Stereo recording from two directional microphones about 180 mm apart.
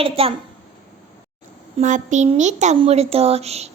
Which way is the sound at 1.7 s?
45° right (ahead or behind).